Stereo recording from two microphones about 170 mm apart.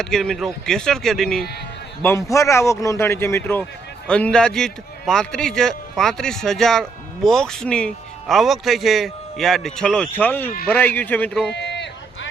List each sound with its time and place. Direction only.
0.0 s a man's voice: centre (ahead or behind)
2.0 s a man's voice: 15° left (ahead or behind)
11.5 s run: 90° left